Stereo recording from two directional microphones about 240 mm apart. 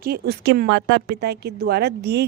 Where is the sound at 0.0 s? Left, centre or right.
Right.